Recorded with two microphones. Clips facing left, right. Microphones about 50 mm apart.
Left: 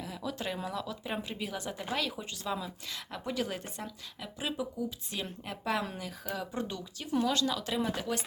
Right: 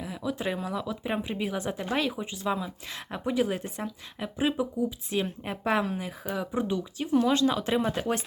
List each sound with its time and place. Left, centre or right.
0.0 s a sound: centre
0.6 s speech: centre
7.3 s speech: right